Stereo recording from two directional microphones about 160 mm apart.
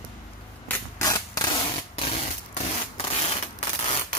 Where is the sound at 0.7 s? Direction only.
20° left (ahead or behind).